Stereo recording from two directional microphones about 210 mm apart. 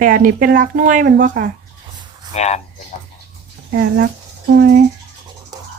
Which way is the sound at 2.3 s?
30° left (ahead or behind).